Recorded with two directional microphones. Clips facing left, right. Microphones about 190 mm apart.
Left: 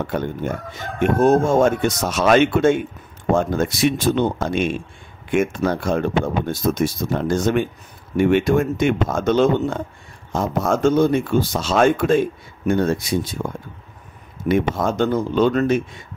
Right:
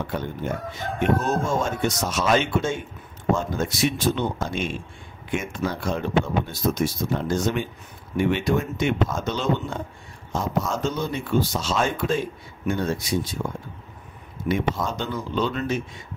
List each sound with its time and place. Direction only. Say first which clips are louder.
0.0 s speech: left 5 dB; 50° left (ahead or behind)
14.5 s speech: left 6 dB; 55° left (ahead or behind)